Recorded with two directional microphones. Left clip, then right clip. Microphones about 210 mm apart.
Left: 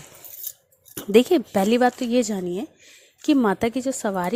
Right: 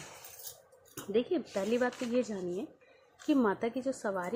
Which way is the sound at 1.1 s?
50° left (ahead or behind).